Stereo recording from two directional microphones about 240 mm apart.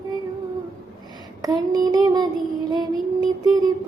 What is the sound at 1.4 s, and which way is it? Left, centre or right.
Female singing, centre.